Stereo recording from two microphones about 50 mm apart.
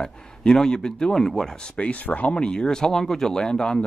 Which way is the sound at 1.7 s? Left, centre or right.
Left.